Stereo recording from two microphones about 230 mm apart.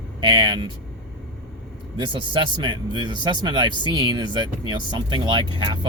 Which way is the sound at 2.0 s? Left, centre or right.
Centre.